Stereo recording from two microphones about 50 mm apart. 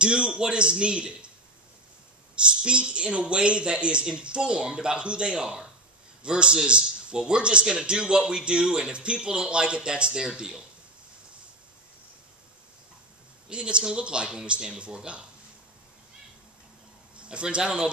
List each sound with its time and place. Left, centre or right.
0.0 s speech: centre
2.6 s a man's voice: right
13.5 s speech: centre
17.2 s a man's voice: right